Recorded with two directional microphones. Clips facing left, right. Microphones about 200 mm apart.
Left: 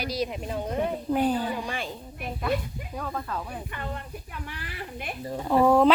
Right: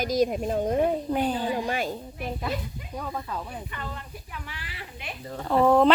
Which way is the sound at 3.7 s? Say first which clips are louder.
Left 2 dB; 50° left (ahead or behind).